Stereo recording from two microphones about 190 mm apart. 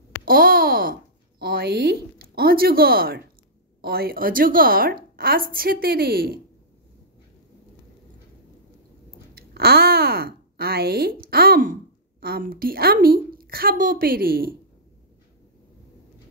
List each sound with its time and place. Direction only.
0.2 s a sound: 50° right (ahead or behind)
1.4 s a woman's voice: 55° right (ahead or behind)
9.3 s speech: 55° right (ahead or behind)